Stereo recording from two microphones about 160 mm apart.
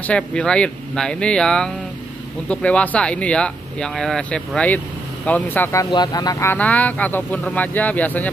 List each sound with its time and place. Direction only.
0.0 s speech: 5° left (ahead or behind); by 6.5 s 25° left (ahead or behind)
6.5 s speech: 10° left (ahead or behind)